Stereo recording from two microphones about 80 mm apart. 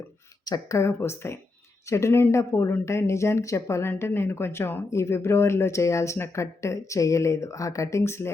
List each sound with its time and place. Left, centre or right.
0.4 s speech: left
0.8 s speech: left